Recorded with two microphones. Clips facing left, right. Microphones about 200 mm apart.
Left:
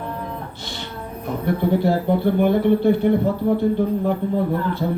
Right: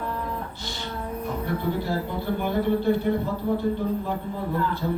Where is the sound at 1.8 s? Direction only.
60° left (ahead or behind).